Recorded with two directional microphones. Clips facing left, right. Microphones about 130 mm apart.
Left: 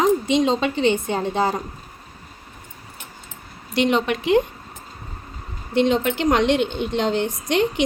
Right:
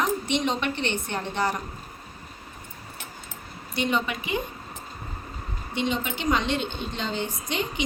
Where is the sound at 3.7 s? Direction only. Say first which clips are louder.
Left 7 dB; 85° left.